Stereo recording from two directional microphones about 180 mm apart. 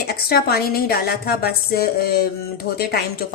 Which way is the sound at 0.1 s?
60° left (ahead or behind).